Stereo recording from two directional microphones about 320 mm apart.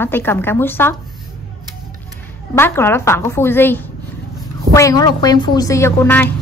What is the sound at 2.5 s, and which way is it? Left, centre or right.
A woman's voice, centre.